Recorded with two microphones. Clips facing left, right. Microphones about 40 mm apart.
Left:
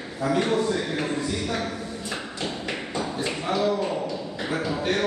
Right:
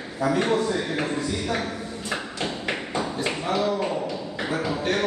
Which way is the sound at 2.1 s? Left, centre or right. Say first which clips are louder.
Right 3 dB; right.